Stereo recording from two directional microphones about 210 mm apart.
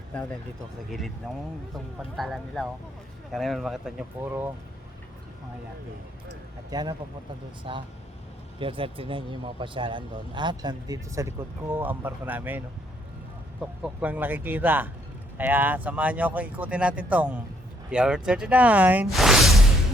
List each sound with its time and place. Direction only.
0.1 s speech: 5° left (ahead or behind)
2.1 s speech: centre (ahead or behind)
6.7 s speech: 20° right (ahead or behind)
13.8 s speech: 5° right (ahead or behind)